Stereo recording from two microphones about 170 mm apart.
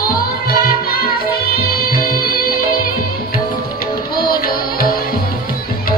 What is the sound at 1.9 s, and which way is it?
Music, 60° left (ahead or behind).